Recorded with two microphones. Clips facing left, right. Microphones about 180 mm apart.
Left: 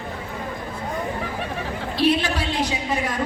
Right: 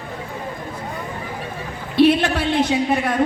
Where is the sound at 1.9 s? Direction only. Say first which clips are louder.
Right 6 dB; 60° right (ahead or behind).